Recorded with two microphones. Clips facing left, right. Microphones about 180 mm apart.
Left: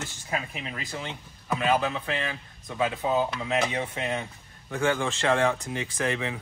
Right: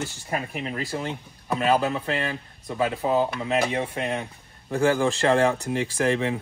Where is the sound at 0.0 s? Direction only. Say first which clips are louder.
Right 3 dB; 35° right (ahead or behind).